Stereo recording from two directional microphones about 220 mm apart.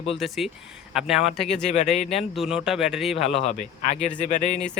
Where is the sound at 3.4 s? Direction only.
30° left (ahead or behind).